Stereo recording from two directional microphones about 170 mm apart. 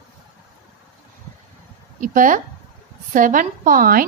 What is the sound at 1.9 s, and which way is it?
A woman's voice, 50° right (ahead or behind).